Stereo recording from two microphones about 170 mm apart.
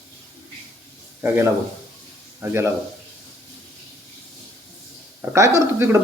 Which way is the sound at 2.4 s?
15° right (ahead or behind).